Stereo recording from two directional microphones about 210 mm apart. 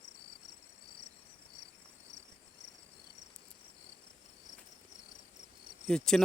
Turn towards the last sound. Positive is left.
turn(degrees=0)  # may be behind; listen again after turning